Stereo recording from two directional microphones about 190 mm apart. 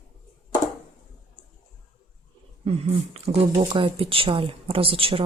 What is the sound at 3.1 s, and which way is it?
Speech, 35° right (ahead or behind).